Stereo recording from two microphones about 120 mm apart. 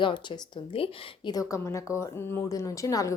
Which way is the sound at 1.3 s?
30° left (ahead or behind).